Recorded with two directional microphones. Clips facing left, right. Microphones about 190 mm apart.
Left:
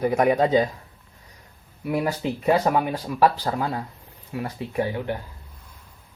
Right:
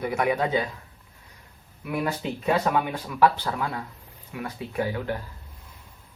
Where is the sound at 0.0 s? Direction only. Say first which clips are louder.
Left 5 dB; 35° left (ahead or behind).